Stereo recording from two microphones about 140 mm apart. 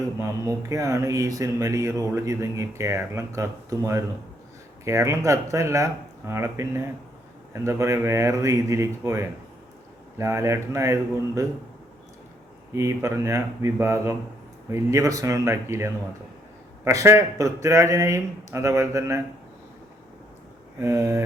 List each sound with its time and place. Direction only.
0.2 s speech: 25° right (ahead or behind)
12.7 s speech: 20° right (ahead or behind)
20.7 s speech: 20° right (ahead or behind)